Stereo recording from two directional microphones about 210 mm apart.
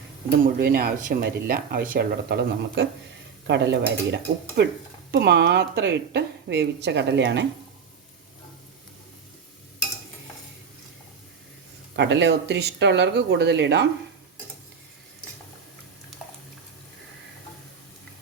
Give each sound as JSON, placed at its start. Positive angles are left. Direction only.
{"t": 0.3, "sound": "speech", "side_deg": -45}
{"t": 11.9, "sound": "speech", "side_deg": -55}